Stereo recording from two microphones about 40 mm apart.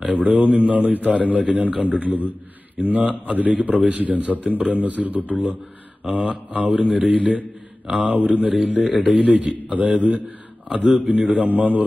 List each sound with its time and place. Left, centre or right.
0.0 s a man's voice: right